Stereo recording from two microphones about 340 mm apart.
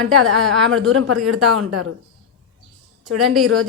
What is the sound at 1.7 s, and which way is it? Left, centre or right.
Speech, right.